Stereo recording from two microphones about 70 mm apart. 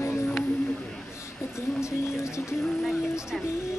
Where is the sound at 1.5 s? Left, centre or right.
Left.